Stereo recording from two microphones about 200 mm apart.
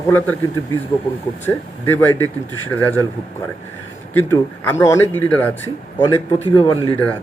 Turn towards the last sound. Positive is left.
turn(degrees=25)  # may be behind; listen again after turning